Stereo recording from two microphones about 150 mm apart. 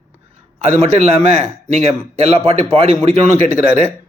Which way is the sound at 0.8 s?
50° right (ahead or behind).